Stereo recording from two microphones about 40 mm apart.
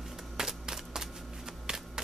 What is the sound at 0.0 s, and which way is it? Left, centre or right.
Shuffling cards, centre.